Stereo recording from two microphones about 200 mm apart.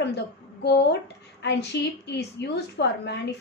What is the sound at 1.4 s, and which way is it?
A woman's voice, 60° left (ahead or behind).